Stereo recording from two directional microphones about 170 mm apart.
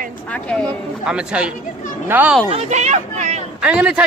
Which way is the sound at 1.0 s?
5° right (ahead or behind).